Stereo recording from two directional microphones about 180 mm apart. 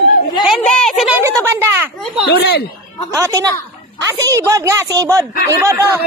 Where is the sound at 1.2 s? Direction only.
15° right (ahead or behind).